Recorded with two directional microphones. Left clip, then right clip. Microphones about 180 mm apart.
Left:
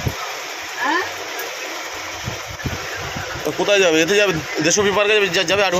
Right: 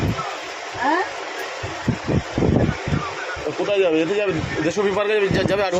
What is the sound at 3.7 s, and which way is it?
A man's voice, 5° left (ahead or behind).